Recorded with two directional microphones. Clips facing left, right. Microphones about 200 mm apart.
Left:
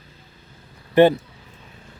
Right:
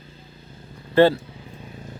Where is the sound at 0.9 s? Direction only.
20° left (ahead or behind).